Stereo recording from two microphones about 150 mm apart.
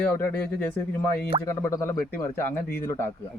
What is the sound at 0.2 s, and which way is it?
A man's voice, 10° left (ahead or behind).